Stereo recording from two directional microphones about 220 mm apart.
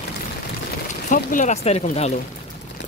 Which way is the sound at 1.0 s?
35° left (ahead or behind).